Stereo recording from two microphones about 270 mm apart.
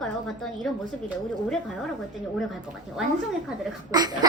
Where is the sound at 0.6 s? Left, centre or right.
Centre.